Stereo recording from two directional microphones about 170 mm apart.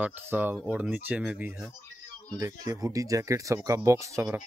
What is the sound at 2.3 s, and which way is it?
Speech, 20° right (ahead or behind).